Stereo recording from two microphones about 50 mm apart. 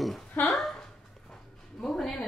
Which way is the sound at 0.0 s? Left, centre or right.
Centre.